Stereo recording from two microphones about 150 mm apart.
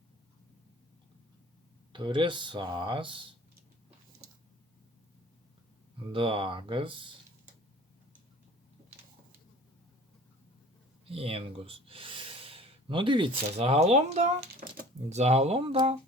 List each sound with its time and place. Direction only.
1.9 s speech: 30° right (ahead or behind)
6.1 s speech: 35° right (ahead or behind)
11.1 s speech: 40° right (ahead or behind)